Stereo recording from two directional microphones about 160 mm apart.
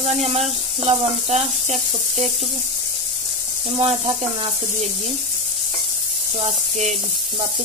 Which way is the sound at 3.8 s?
40° right (ahead or behind).